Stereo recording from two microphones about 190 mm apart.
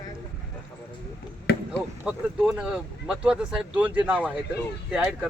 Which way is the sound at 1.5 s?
55° left (ahead or behind).